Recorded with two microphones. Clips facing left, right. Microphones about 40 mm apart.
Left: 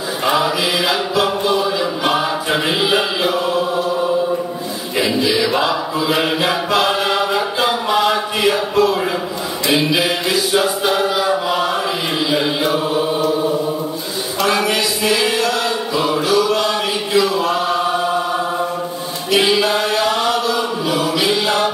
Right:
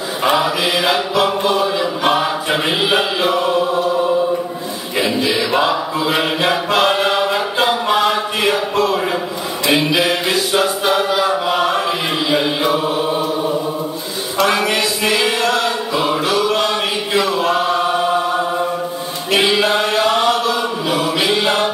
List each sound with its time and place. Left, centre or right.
0.3 s mantra: right
2.8 s mantra: right
4.9 s mantra: right
6.2 s chant: centre
7.5 s a sound: right
9.7 s mantra: right
11.4 s chant: right
14.5 s chant: right
16.3 s a sound: right
17.3 s chant: right
19.3 s chant: right